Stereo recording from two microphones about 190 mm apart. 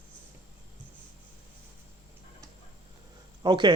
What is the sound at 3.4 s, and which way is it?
Speech, 25° right (ahead or behind).